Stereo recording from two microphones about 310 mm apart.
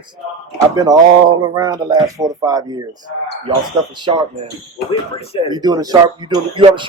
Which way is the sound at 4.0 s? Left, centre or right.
Centre.